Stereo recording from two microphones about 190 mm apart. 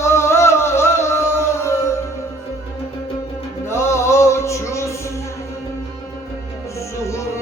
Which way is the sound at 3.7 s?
15° left (ahead or behind).